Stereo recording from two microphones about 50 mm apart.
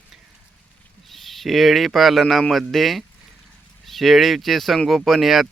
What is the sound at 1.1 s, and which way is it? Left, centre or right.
Speech, centre.